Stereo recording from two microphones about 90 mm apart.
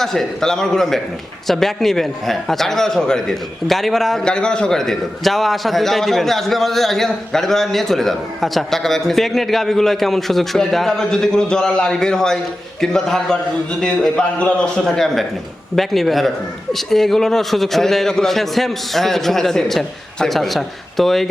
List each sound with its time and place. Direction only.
0.0 s speech: 5° left (ahead or behind)